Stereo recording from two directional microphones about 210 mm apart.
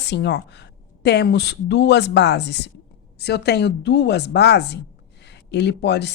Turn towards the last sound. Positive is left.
turn(degrees=55)  # may be behind; listen again after turning